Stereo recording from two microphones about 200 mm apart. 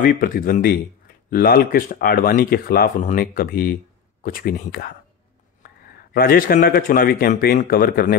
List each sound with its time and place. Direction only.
0.0 s speech: 45° left (ahead or behind)
6.1 s speech: 45° left (ahead or behind)